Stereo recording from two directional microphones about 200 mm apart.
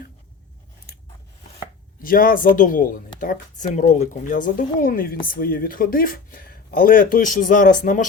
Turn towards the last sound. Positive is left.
turn(degrees=40)  # may be behind; listen again after turning